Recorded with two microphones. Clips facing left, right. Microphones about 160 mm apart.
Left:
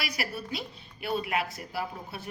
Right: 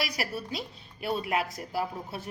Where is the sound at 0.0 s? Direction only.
40° right (ahead or behind).